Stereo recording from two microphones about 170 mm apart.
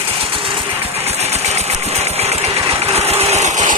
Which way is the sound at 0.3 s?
30° right (ahead or behind).